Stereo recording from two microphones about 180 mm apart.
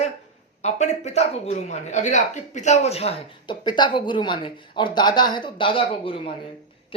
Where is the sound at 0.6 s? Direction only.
40° left (ahead or behind).